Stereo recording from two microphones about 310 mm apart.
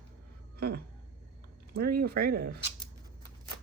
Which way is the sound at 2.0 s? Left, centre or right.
Right.